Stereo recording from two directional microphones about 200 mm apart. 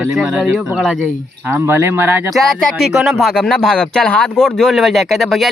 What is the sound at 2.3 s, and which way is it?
Speech, centre (ahead or behind).